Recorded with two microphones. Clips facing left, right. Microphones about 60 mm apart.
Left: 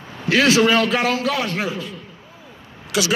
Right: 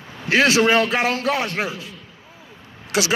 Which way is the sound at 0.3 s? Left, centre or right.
Right.